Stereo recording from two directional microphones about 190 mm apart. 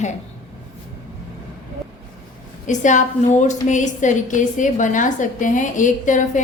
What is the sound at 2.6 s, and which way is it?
A woman's voice, 40° left (ahead or behind).